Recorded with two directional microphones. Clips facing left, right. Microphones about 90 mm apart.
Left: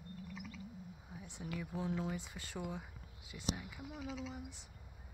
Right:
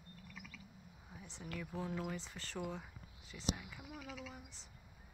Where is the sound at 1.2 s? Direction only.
15° left (ahead or behind).